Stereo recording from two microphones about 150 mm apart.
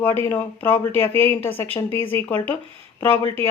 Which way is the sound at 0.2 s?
15° left (ahead or behind).